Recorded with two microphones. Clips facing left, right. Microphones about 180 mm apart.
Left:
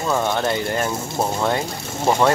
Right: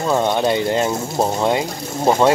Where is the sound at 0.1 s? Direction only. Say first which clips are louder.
Right 4 dB; 20° right (ahead or behind).